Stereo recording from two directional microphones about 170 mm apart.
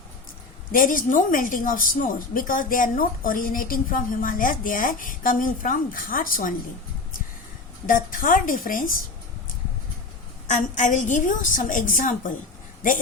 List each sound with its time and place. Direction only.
0.7 s a woman's voice: 55° left (ahead or behind)
7.9 s a woman's voice: 55° left (ahead or behind)
10.5 s a woman's voice: 45° left (ahead or behind)